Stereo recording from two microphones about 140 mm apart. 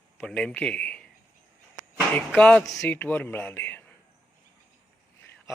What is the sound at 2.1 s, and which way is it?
Speech, 10° left (ahead or behind).